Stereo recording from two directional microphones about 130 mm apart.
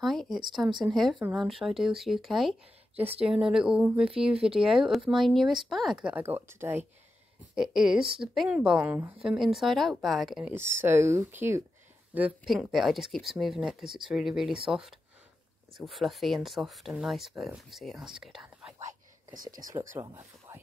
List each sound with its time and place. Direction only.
0.0 s speech: centre (ahead or behind); by 6.8 s 15° right (ahead or behind)
7.5 s speech: 5° right (ahead or behind)
9.4 s speech: centre (ahead or behind)
10.5 s speech: 15° right (ahead or behind)
18.8 s whispering: 80° right
19.7 s speech: 20° right (ahead or behind)